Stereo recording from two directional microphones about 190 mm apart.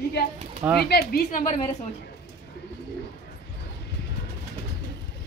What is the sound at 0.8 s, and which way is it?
Speech, 55° left (ahead or behind).